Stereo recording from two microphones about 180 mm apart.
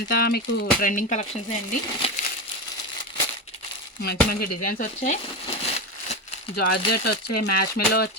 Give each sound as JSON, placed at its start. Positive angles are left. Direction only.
{"t": 0.1, "sound": "speech", "side_deg": 60}
{"t": 0.8, "sound": "speech", "side_deg": 50}
{"t": 2.0, "sound": "crumpling", "side_deg": 30}
{"t": 4.0, "sound": "speech", "side_deg": 60}
{"t": 6.6, "sound": "speech", "side_deg": 65}